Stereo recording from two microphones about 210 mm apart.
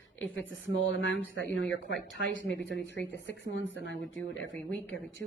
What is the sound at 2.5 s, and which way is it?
Speech, 55° left (ahead or behind).